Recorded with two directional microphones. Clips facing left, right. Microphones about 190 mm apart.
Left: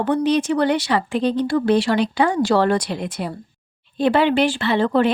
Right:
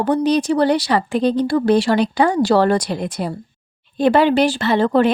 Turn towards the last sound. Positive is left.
turn(degrees=-40)  # may be behind; listen again after turning